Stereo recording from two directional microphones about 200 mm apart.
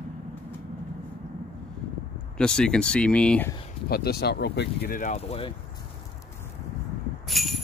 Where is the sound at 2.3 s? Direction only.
5° left (ahead or behind).